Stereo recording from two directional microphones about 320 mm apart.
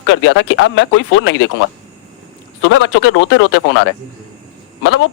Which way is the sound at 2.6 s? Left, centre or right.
Left.